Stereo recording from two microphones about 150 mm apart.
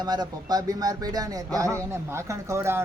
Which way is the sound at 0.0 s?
25° right (ahead or behind).